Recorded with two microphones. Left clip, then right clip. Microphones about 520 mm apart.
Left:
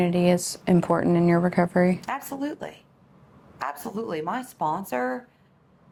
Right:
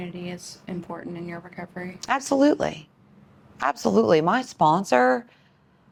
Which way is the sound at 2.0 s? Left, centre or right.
Right.